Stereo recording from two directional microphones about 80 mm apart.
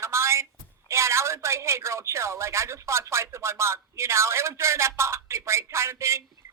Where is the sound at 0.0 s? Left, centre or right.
Right.